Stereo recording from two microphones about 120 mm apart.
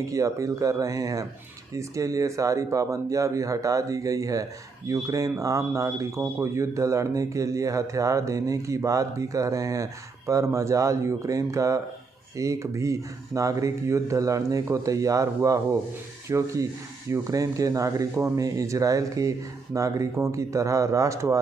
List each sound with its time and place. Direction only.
0.0 s speech: 25° right (ahead or behind)